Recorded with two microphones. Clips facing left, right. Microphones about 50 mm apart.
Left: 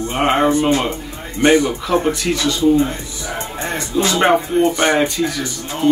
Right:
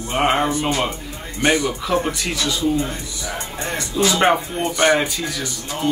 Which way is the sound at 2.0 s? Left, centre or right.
Centre.